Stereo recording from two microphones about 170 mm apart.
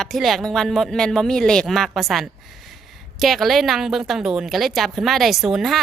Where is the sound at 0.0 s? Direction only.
Centre (ahead or behind).